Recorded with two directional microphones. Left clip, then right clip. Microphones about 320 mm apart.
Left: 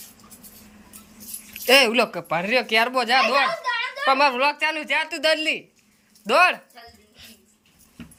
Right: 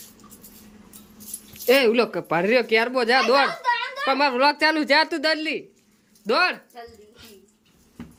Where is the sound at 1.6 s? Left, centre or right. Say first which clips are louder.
Left 1 dB; centre.